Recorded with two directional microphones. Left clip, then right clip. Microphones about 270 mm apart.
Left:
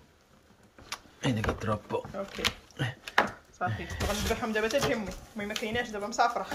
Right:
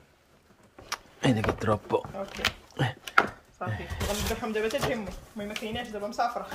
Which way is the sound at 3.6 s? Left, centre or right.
Centre.